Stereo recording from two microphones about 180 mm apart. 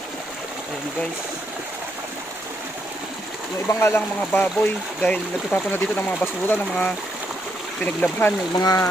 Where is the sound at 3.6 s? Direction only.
15° left (ahead or behind).